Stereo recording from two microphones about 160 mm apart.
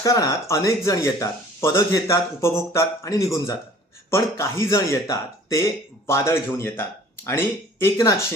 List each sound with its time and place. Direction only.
0.0 s speech: 20° left (ahead or behind)